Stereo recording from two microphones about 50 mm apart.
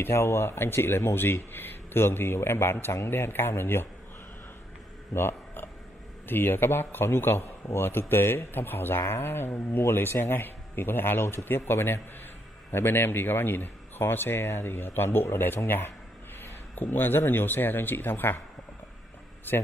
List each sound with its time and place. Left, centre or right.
0.0 s speech: left
3.1 s speech: left
5.1 s a sound: left
6.2 s speech: left
19.5 s speech: left